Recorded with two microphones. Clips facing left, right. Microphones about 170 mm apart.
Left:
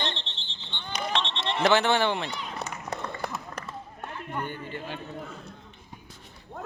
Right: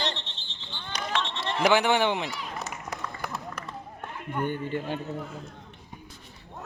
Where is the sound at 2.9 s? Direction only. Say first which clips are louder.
Left 3 dB; 30° left (ahead or behind).